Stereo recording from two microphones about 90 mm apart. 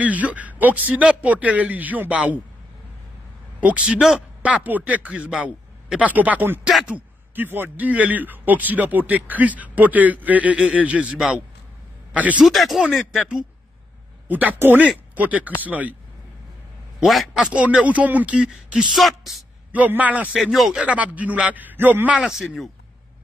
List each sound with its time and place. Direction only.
0.0 s a man's voice: 15° right (ahead or behind)
3.6 s a man's voice: 15° right (ahead or behind)
12.4 s speech: centre (ahead or behind)
14.2 s a man's voice: 20° right (ahead or behind)
17.0 s a man's voice: centre (ahead or behind)
19.7 s a man's voice: 15° right (ahead or behind)
20.3 s speech: 5° right (ahead or behind)
20.8 s a man's voice: 15° right (ahead or behind)
22.2 s speech: 5° right (ahead or behind)